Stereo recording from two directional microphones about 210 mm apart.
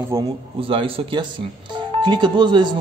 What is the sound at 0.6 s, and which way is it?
Music, 25° right (ahead or behind).